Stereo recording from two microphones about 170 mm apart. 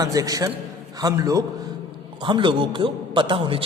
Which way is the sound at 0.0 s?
20° right (ahead or behind).